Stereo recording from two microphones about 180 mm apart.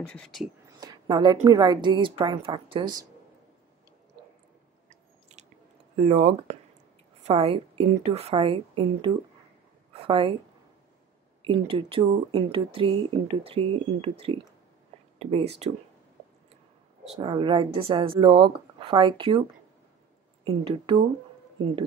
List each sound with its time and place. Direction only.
0.0 s speech: 5° left (ahead or behind)
0.7 s speech: 20° right (ahead or behind)
5.4 s chewing: 40° right (ahead or behind)
5.9 s a woman's voice: 35° right (ahead or behind)
11.4 s a woman's voice: 30° right (ahead or behind)
17.2 s speech: 25° right (ahead or behind)
20.4 s speech: 25° right (ahead or behind)